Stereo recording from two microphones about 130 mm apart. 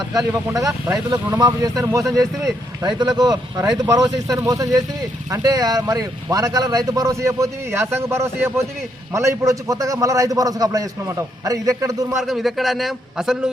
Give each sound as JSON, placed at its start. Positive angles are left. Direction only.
{"t": 0.1, "sound": "speech", "side_deg": -25}
{"t": 12.1, "sound": "a man's voice", "side_deg": 0}